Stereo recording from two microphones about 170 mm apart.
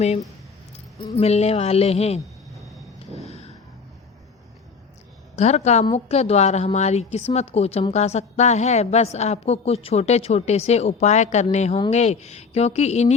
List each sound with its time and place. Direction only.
1.2 s a woman's voice: 40° left (ahead or behind)
2.6 s vehicle: centre (ahead or behind)
3.2 s a sound: 40° left (ahead or behind)
5.4 s a woman's voice: 40° left (ahead or behind)